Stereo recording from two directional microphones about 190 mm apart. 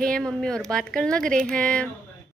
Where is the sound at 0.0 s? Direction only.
5° left (ahead or behind).